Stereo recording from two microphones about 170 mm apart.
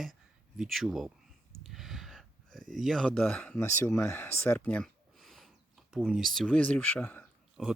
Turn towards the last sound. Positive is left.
turn(degrees=0)  # may be behind; listen again after turning